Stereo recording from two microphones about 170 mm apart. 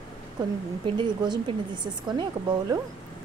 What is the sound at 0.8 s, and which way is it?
Speech, 25° right (ahead or behind).